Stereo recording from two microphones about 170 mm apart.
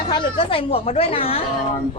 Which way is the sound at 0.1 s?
30° left (ahead or behind).